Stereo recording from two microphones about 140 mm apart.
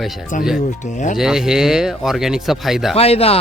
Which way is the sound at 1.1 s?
5° right (ahead or behind).